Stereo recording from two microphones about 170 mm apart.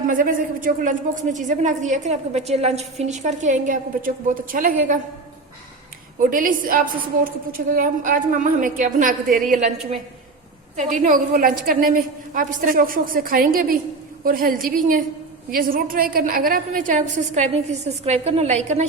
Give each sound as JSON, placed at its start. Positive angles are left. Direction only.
{"t": 0.1, "sound": "a woman's voice", "side_deg": -55}
{"t": 6.1, "sound": "a woman's voice", "side_deg": -50}
{"t": 10.8, "sound": "a woman's voice", "side_deg": -45}